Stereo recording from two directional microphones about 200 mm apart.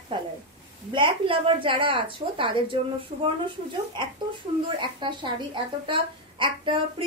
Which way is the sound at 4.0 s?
20° right (ahead or behind).